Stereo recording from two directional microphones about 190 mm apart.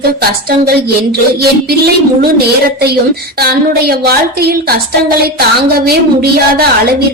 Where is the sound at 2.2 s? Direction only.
55° right (ahead or behind).